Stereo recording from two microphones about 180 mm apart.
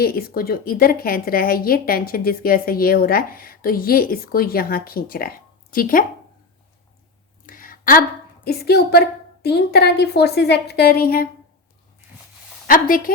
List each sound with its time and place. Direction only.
0.0 s a woman's voice: 55° left (ahead or behind)
7.4 s a sound: 50° left (ahead or behind)
8.4 s a woman's voice: 65° left (ahead or behind)
12.6 s a woman's voice: 50° left (ahead or behind)